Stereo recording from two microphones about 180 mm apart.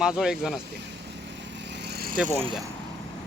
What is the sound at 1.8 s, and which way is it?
Vehicle, 60° right (ahead or behind).